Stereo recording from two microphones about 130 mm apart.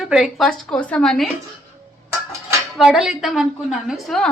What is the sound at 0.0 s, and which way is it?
A woman's voice, 5° right (ahead or behind).